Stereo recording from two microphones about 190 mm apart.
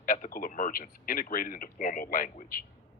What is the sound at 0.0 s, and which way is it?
Speech, 45° left (ahead or behind).